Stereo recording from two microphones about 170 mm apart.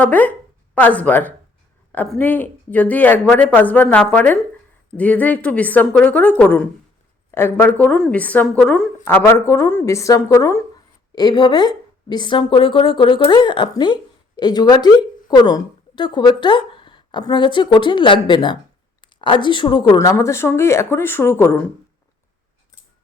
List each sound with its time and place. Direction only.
0.0 s a woman's voice: 10° left (ahead or behind); by 20.1 s 30° left (ahead or behind)
20.1 s speech: 15° left (ahead or behind)